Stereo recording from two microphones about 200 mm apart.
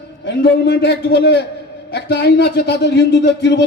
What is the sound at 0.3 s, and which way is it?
A man's voice, 55° left (ahead or behind).